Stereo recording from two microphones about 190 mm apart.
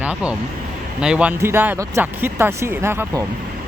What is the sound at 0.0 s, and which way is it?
Speech, 5° right (ahead or behind).